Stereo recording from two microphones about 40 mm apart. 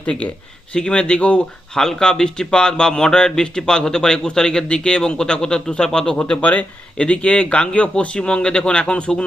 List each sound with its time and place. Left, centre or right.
0.7 s speech: left
1.7 s speech: centre